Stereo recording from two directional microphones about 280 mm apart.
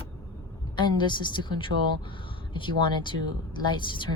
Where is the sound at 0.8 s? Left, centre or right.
Centre.